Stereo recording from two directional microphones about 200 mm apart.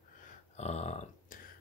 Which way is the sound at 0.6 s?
35° left (ahead or behind).